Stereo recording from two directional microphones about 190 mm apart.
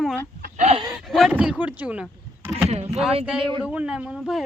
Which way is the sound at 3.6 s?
5° right (ahead or behind).